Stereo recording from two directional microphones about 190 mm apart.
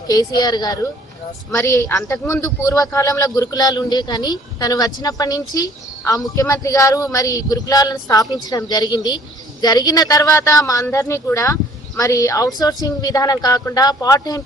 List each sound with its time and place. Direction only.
0.1 s a man's voice: 20° left (ahead or behind)